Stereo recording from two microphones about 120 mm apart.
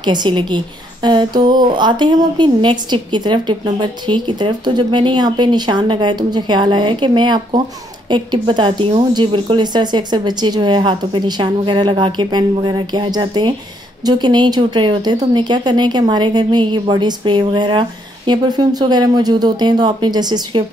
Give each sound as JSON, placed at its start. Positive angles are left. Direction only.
{"t": 0.0, "sound": "a woman's voice", "side_deg": -40}